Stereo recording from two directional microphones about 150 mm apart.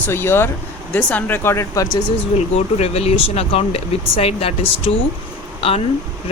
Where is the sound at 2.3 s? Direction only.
45° left (ahead or behind).